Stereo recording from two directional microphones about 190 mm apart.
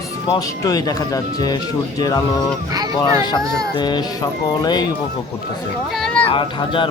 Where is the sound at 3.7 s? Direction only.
20° left (ahead or behind).